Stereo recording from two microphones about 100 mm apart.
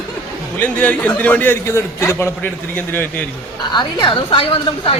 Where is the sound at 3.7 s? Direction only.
55° left (ahead or behind); by 4.9 s 70° left (ahead or behind).